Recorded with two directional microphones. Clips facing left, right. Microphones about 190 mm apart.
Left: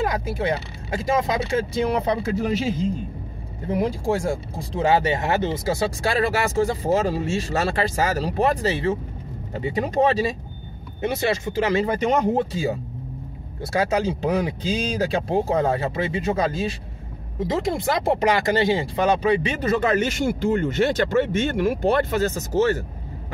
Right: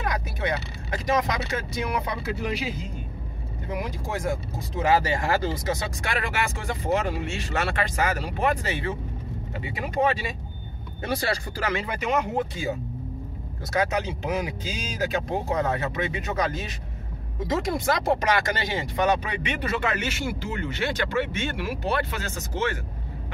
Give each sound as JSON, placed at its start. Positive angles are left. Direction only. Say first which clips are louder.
{"t": 0.0, "sound": "speech", "louder": "left 5 dB", "side_deg": 25}
{"t": 11.0, "sound": "speech", "louder": "left 4 dB", "side_deg": 25}
{"t": 11.7, "sound": "speech", "louder": "left 5 dB", "side_deg": 35}